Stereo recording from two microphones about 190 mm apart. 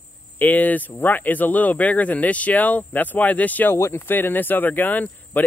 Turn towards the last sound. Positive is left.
turn(degrees=10)  # may be behind; listen again after turning